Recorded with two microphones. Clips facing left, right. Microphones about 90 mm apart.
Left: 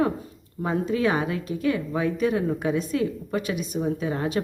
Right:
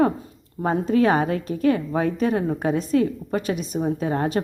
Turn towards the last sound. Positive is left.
turn(degrees=-45)  # may be behind; listen again after turning